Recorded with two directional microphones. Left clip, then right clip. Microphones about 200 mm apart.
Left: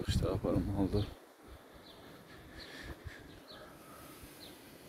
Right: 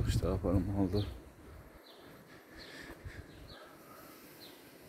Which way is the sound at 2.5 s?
Centre (ahead or behind).